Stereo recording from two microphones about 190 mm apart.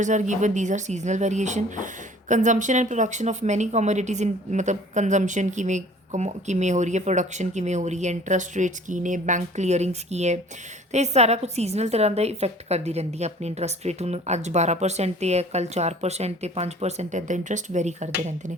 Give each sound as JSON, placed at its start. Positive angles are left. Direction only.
{"t": 0.0, "sound": "speech", "side_deg": -40}